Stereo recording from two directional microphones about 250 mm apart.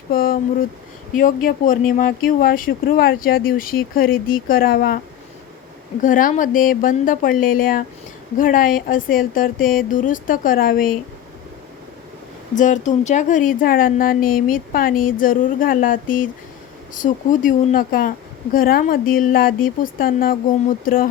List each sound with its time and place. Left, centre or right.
0.1 s a sound: left
1.1 s speech: left
6.0 s speech: left
12.5 s speech: left